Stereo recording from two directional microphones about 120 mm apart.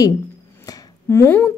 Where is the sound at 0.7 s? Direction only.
20° left (ahead or behind).